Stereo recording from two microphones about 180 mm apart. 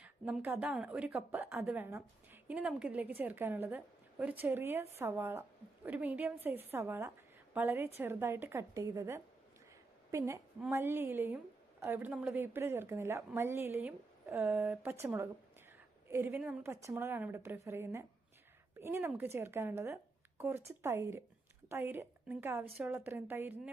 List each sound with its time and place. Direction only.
0.0 s a woman's voice: 10° right (ahead or behind)